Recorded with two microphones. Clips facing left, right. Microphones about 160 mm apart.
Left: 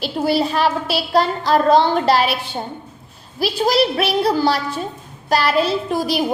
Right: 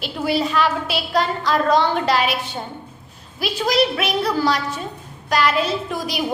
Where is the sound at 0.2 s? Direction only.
35° left (ahead or behind).